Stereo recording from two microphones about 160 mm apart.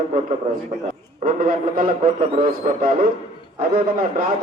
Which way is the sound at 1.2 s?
60° right (ahead or behind).